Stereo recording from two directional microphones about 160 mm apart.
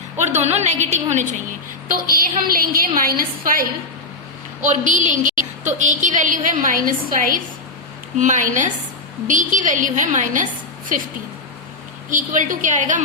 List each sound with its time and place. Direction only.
0.4 s a woman's voice: 45° right (ahead or behind)
2.0 s a woman's voice: 65° right (ahead or behind)
4.6 s a woman's voice: 50° right (ahead or behind)
12.1 s a woman's voice: 55° right (ahead or behind)